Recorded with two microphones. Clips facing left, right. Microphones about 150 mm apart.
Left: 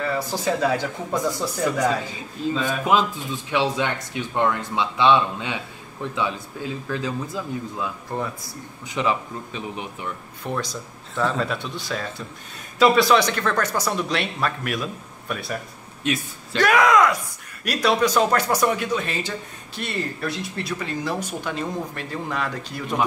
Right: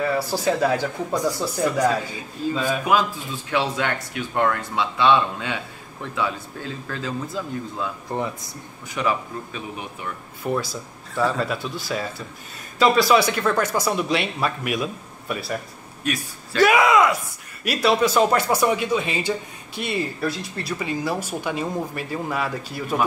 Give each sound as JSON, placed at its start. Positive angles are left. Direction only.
{"t": 0.0, "sound": "speech", "side_deg": -10}
{"t": 2.4, "sound": "a man's voice", "side_deg": 20}
{"t": 8.1, "sound": "speech", "side_deg": -20}
{"t": 8.8, "sound": "a man's voice", "side_deg": 20}
{"t": 10.4, "sound": "speech", "side_deg": -5}
{"t": 16.0, "sound": "a man's voice", "side_deg": 25}
{"t": 16.5, "sound": "speech", "side_deg": -5}